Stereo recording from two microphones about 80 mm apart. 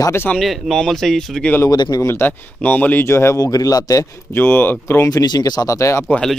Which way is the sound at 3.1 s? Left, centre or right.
Left.